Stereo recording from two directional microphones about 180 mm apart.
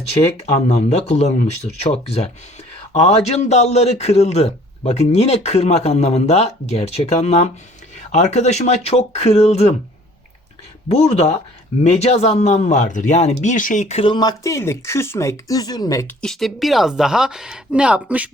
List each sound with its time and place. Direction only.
0.4 s a man's voice: 35° left (ahead or behind)
10.8 s a man's voice: 35° left (ahead or behind); by 16.1 s 20° left (ahead or behind)
16.2 s speech: centre (ahead or behind)